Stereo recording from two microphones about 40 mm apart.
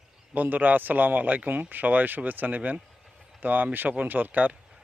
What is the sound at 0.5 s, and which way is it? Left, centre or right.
A man's voice, right.